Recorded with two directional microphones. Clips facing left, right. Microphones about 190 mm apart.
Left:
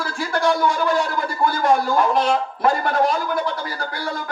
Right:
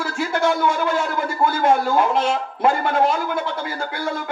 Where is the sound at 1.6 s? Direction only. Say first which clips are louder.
Even; 25° right (ahead or behind).